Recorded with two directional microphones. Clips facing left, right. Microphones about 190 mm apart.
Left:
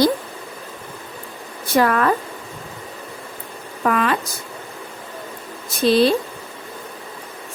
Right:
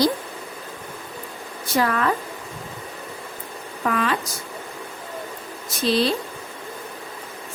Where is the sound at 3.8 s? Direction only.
55° left (ahead or behind).